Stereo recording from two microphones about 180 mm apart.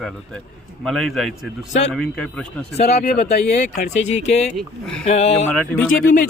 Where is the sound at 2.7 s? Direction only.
40° left (ahead or behind).